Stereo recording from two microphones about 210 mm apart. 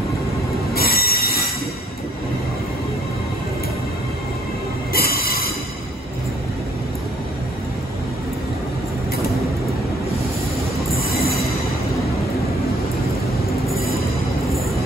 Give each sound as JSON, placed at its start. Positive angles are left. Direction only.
{"t": 0.7, "sound": "train wheels squealing", "side_deg": 45}
{"t": 4.9, "sound": "train wheels squealing", "side_deg": 45}
{"t": 13.7, "sound": "music", "side_deg": 0}